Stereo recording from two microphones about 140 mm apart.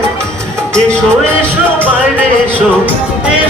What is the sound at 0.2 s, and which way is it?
Music, 5° left (ahead or behind).